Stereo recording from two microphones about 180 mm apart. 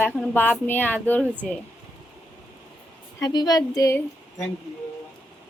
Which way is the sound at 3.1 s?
20° left (ahead or behind).